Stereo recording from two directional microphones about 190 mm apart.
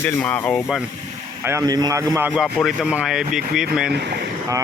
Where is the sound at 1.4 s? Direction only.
15° right (ahead or behind).